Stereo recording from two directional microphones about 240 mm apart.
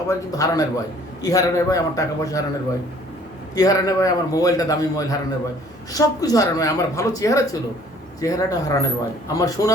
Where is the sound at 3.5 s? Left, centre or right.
Centre.